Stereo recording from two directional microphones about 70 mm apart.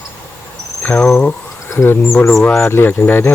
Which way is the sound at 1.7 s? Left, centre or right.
Left.